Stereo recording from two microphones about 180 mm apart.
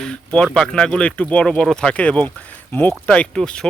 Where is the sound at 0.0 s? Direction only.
5° left (ahead or behind).